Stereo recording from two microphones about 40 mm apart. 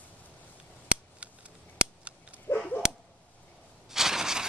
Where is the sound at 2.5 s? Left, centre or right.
Left.